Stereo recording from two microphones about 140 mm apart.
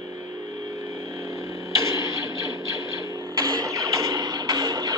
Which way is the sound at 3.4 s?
25° right (ahead or behind).